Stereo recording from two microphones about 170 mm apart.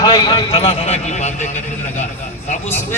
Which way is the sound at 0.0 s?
25° left (ahead or behind).